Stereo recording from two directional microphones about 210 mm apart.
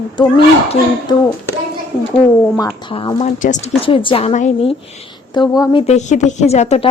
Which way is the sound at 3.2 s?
35° left (ahead or behind).